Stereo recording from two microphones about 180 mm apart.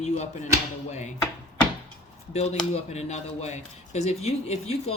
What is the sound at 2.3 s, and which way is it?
Speech, 35° left (ahead or behind).